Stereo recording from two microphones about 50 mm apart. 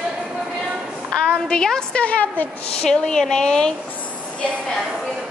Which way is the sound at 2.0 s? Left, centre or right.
Left.